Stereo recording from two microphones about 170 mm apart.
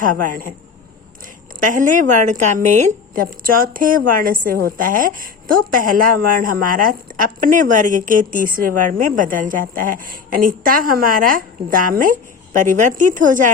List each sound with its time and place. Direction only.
0.0 s a woman's voice: 55° right (ahead or behind)
1.6 s a woman's voice: 50° right (ahead or behind)